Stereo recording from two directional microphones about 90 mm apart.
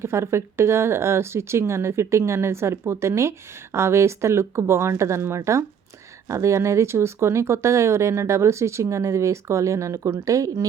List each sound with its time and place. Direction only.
0.0 s speech: 30° right (ahead or behind)